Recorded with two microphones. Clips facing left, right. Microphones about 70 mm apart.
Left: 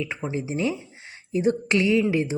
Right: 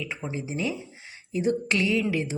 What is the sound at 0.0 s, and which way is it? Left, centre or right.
A woman's voice, left.